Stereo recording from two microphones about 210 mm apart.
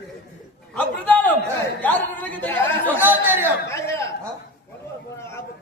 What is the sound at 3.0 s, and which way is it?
Speech, 10° right (ahead or behind).